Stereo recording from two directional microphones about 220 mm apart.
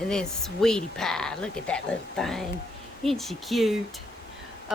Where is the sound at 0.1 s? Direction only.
Centre (ahead or behind).